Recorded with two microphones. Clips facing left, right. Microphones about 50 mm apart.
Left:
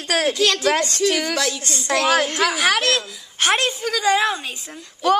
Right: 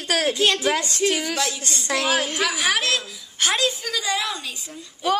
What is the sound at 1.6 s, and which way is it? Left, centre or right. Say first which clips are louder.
Speech: left 3 dB; left.